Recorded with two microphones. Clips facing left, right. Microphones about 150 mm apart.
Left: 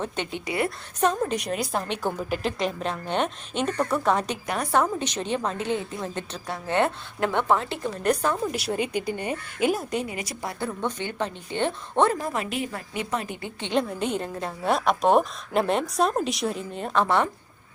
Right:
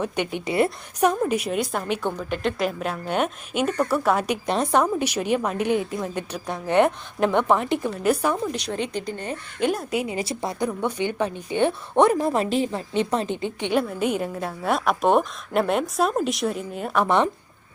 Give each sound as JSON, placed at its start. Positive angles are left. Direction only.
{"t": 0.0, "sound": "a woman's voice", "side_deg": -15}
{"t": 1.2, "sound": "a woman's voice", "side_deg": -5}
{"t": 4.4, "sound": "a woman's voice", "side_deg": -25}
{"t": 8.5, "sound": "speech", "side_deg": 5}
{"t": 10.1, "sound": "a woman's voice", "side_deg": -25}
{"t": 10.6, "sound": "a woman's voice", "side_deg": -10}
{"t": 12.2, "sound": "a woman's voice", "side_deg": -35}